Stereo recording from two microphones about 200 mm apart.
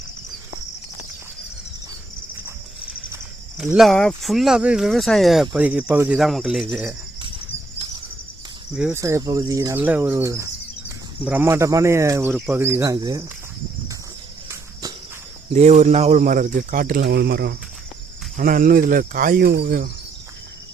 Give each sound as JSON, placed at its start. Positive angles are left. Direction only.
{"t": 3.6, "sound": "speech", "side_deg": 0}
{"t": 7.2, "sound": "a sound", "side_deg": -25}
{"t": 8.7, "sound": "speech", "side_deg": -5}
{"t": 9.0, "sound": "speech", "side_deg": -15}
{"t": 15.5, "sound": "speech", "side_deg": -35}